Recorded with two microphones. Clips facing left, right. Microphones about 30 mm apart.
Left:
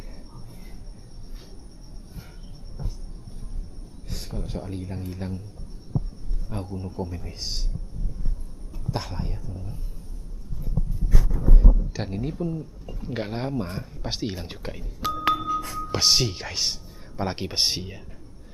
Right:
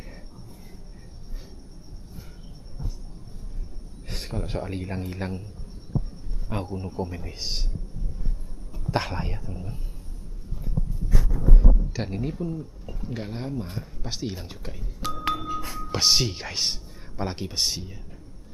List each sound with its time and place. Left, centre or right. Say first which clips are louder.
4.1 s a man's voice: right 3 dB; right
5.9 s a sound: even; centre
6.5 s a man's voice: right 3 dB; right
8.9 s a man's voice: right 6 dB; right
10.7 s a sound: even; centre
13.1 s speech: left 4 dB; left
15.0 s music: left 4 dB; centre
15.4 s music: left 4 dB; centre
17.3 s speech: left 3 dB; left